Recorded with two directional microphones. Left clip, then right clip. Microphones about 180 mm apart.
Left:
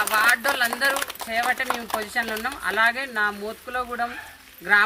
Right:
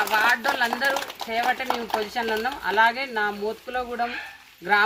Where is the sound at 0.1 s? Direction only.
45° left (ahead or behind).